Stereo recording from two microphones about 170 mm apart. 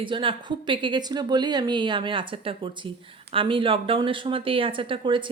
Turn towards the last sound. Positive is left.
turn(degrees=-30)  # may be behind; listen again after turning